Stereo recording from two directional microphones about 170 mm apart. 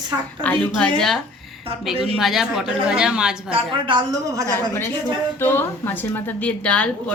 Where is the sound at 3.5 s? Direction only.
30° right (ahead or behind).